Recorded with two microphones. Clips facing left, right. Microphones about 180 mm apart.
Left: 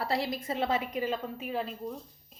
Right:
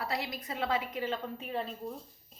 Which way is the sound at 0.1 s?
30° left (ahead or behind).